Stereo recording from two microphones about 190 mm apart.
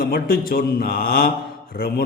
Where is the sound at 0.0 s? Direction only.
50° left (ahead or behind).